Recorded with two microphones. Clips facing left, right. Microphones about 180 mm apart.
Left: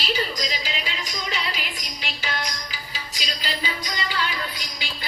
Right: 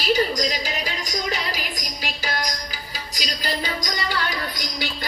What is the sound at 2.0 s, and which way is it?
Music, 40° right (ahead or behind).